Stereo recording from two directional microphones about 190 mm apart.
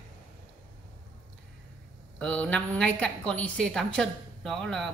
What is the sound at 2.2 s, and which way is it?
A woman's voice, 5° left (ahead or behind).